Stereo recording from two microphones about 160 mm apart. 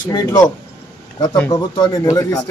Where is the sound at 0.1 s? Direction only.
25° left (ahead or behind).